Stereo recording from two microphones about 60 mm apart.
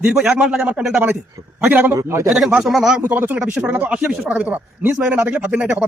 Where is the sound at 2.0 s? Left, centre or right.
Right.